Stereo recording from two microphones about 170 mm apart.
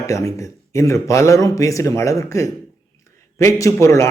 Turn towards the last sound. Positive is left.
turn(degrees=15)  # may be behind; listen again after turning